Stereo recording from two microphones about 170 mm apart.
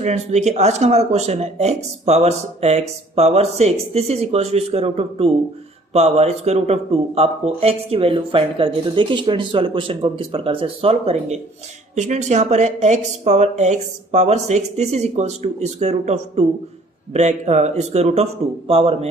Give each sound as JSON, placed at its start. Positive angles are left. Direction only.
{"t": 0.0, "sound": "speech", "side_deg": -40}